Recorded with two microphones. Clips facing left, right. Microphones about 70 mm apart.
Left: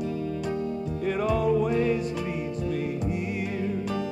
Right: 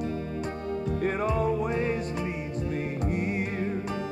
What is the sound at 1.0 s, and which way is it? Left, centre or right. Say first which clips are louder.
Music: left 3 dB; right.